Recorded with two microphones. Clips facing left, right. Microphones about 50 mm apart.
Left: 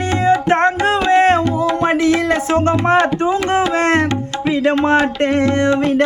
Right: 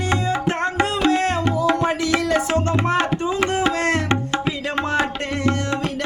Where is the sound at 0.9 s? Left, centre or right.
Left.